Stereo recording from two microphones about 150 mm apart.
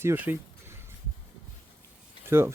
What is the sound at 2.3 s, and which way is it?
Speech, 15° right (ahead or behind).